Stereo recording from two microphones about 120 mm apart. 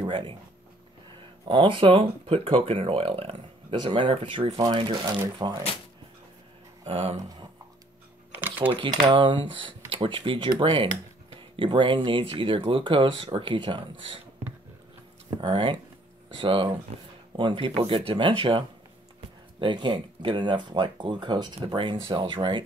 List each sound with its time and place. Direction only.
1.5 s speech: 45° right (ahead or behind)
6.8 s speech: 55° right (ahead or behind)
8.3 s a sound: 15° right (ahead or behind)
8.7 s speech: 40° right (ahead or behind)
15.2 s speech: 40° right (ahead or behind)
19.6 s speech: 40° right (ahead or behind)